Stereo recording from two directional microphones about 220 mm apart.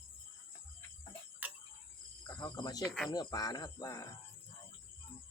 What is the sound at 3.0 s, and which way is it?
Speech, 20° left (ahead or behind).